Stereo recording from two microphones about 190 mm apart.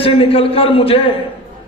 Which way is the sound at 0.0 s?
30° left (ahead or behind).